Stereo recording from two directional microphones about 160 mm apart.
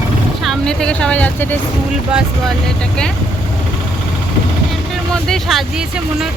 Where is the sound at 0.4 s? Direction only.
5° left (ahead or behind).